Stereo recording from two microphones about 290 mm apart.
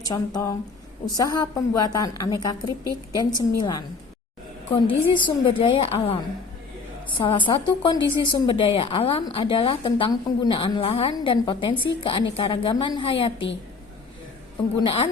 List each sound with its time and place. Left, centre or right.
0.1 s a woman's voice: centre
4.9 s a woman's voice: centre
7.2 s a woman's voice: centre
14.8 s a woman's voice: centre